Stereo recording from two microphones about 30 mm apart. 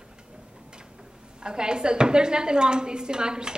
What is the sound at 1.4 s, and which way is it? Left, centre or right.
A woman's voice, right.